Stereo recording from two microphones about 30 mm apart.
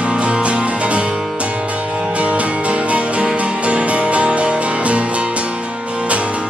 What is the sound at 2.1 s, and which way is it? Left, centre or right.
Music, right.